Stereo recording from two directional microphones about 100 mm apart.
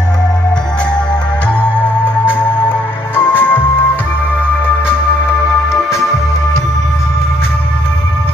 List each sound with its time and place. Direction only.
1.8 s music: 20° left (ahead or behind)